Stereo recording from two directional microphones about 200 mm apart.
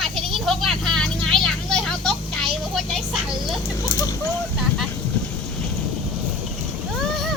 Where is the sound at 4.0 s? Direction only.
15° left (ahead or behind).